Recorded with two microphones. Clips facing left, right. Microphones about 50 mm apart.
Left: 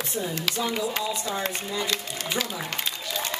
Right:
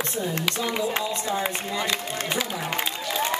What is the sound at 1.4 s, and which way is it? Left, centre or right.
Speech, centre.